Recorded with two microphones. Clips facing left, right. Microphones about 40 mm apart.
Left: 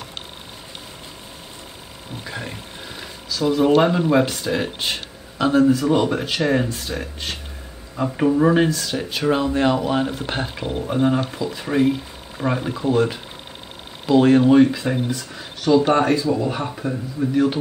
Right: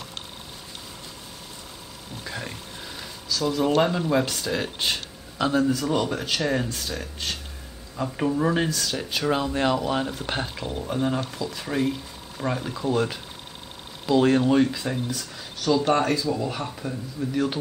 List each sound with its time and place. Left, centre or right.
2.2 s speech: centre
17.3 s speech: centre